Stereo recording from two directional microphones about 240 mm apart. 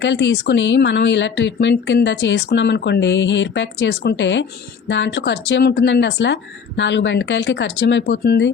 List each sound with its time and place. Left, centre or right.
0.0 s speech: left